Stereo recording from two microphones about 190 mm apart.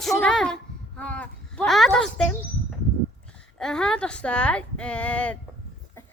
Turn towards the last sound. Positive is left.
turn(degrees=5)  # may be behind; listen again after turning